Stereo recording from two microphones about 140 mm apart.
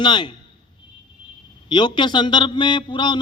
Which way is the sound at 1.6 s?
35° left (ahead or behind).